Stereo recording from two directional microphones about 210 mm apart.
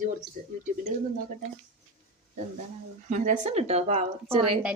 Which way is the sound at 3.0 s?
35° right (ahead or behind).